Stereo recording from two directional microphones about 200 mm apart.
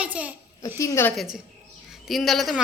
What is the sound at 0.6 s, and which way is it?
Speech, 15° left (ahead or behind).